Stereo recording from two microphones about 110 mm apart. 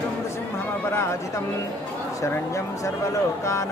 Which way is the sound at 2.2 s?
30° left (ahead or behind).